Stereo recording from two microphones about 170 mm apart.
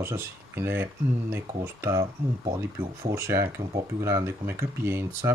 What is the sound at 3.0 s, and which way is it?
Speech, 15° right (ahead or behind).